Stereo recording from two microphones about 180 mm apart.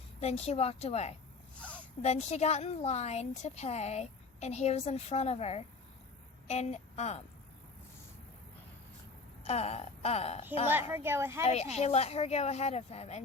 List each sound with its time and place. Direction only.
0.2 s a woman's voice: 35° left (ahead or behind)
9.4 s a woman's voice: 35° left (ahead or behind)
10.7 s a woman's voice: 10° right (ahead or behind)
11.4 s a woman's voice: 35° left (ahead or behind)